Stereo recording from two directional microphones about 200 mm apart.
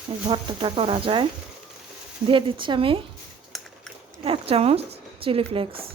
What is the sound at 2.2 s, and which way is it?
Speech, 25° right (ahead or behind).